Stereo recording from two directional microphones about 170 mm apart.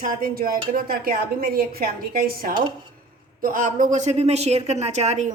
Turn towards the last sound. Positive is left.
turn(degrees=-40)  # may be behind; listen again after turning